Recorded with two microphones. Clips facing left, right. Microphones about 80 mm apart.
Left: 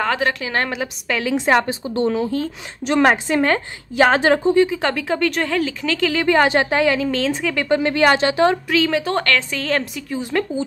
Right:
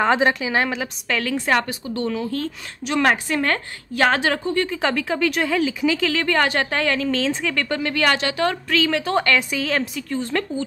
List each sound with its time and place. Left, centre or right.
0.0 s a woman's voice: right
0.4 s a woman's voice: centre
0.7 s speech: centre
1.3 s a woman's voice: left
4.2 s a woman's voice: left
4.8 s speech: centre
5.9 s speech: centre
6.2 s a woman's voice: centre
7.6 s a woman's voice: left
8.6 s speech: centre
9.2 s a woman's voice: centre
9.6 s speech: centre